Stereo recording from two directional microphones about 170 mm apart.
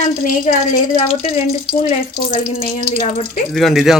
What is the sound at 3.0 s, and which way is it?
Speech, 45° left (ahead or behind).